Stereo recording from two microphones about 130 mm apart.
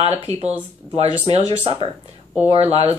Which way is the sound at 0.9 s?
50° right (ahead or behind).